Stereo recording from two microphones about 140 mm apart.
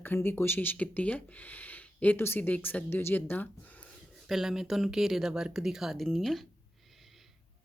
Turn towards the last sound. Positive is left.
turn(degrees=0)  # may be behind; listen again after turning